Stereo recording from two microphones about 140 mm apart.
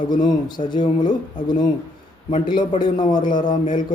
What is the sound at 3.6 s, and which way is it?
Mantra, 70° left (ahead or behind).